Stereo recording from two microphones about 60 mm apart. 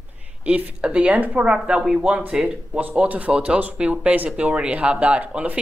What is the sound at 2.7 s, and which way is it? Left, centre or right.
Speech, right.